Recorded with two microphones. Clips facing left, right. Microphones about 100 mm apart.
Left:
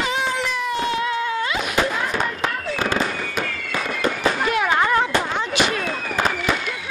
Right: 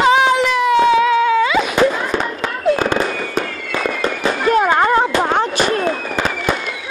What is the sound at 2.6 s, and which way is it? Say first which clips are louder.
Fireworks: right 11 dB; 55° right (ahead or behind).